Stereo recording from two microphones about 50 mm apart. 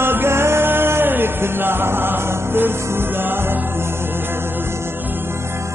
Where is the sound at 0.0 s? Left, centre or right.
Right.